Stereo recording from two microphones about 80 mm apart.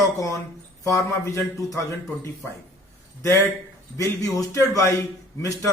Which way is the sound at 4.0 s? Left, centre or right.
Left.